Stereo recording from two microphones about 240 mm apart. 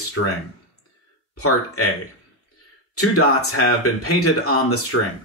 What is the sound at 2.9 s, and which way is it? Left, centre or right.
A man's voice, left.